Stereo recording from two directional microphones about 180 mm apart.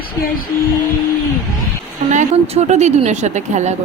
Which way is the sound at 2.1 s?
40° right (ahead or behind).